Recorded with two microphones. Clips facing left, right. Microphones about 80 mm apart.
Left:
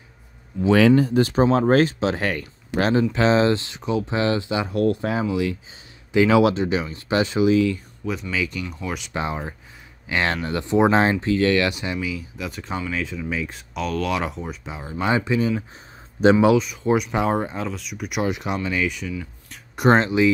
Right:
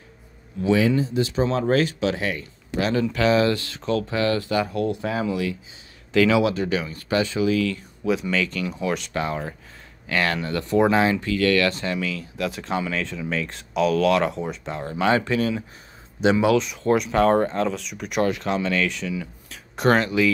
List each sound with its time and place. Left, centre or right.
0.7 s speech: left; by 4.6 s centre
6.1 s speech: left
8.0 s speech: centre
8.4 s speech: centre
9.1 s speech: centre
12.4 s speech: centre
16.2 s speech: left
16.5 s speech: centre
19.1 s a sound: centre
19.9 s speech: left